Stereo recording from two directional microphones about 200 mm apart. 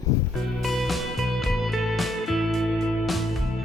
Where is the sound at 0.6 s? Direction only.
Centre (ahead or behind).